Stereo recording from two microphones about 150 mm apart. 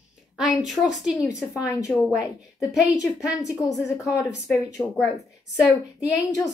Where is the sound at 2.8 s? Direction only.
20° left (ahead or behind).